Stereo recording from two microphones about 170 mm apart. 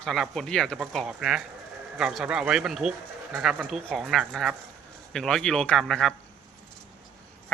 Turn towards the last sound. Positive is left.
turn(degrees=0)  # may be behind; listen again after turning